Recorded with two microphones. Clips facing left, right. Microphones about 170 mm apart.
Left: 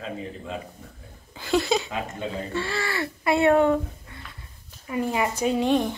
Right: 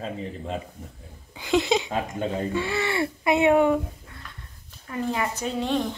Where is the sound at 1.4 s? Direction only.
20° right (ahead or behind).